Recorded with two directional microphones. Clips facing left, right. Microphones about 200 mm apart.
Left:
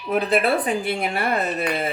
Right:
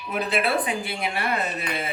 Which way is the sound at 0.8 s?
50° left (ahead or behind).